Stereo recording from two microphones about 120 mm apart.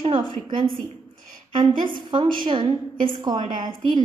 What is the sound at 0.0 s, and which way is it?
Speech, 40° right (ahead or behind).